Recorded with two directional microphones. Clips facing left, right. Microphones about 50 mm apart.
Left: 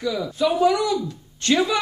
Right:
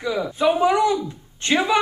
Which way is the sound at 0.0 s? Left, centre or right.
Right.